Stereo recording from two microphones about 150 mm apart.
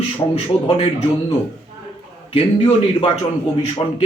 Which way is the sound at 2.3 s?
40° left (ahead or behind).